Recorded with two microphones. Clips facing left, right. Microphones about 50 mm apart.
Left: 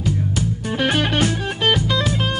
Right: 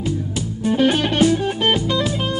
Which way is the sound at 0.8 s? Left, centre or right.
Left.